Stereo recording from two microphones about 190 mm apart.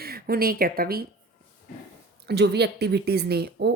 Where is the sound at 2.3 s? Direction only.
60° right (ahead or behind).